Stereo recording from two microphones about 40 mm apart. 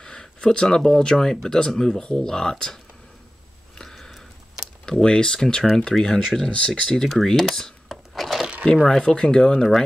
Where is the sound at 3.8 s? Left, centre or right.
Centre.